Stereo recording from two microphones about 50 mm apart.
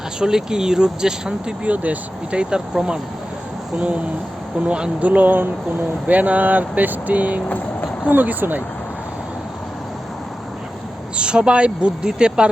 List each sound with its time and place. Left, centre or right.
0.2 s speech: centre
1.6 s speech: right
3.8 s speech: right
5.0 s speech: right
7.4 s vehicle: left
8.1 s speech: right
11.2 s speech: centre